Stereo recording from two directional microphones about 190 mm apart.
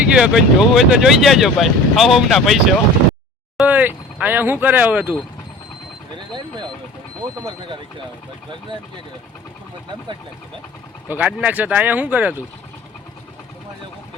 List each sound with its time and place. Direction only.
0.1 s speech: 5° right (ahead or behind)
7.2 s speech: 25° right (ahead or behind)
11.1 s speech: 5° right (ahead or behind)